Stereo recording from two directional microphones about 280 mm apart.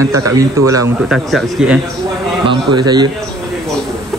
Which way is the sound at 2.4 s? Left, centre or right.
Centre.